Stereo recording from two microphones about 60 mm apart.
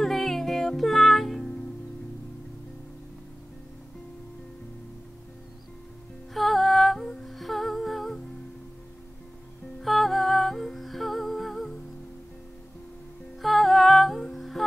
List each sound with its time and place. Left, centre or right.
0.0 s music: centre
6.3 s humming: centre
9.8 s humming: centre
13.4 s music: centre